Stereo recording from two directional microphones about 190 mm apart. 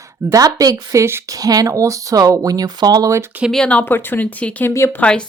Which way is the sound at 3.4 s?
5° left (ahead or behind).